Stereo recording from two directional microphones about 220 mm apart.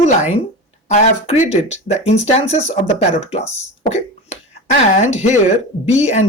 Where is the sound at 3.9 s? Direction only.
35° left (ahead or behind).